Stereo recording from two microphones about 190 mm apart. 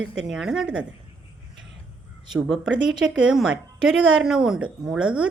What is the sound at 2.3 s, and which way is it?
A woman's voice, centre (ahead or behind).